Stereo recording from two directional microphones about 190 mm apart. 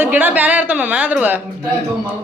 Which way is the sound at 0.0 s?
10° right (ahead or behind).